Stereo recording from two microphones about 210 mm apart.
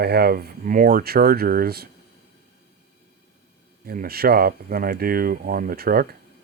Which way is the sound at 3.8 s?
45° right (ahead or behind).